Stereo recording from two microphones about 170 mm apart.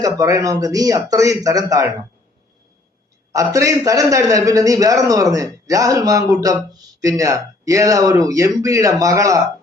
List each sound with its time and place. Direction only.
0.0 s a man's voice: 20° right (ahead or behind)
3.3 s a man's voice: 20° right (ahead or behind)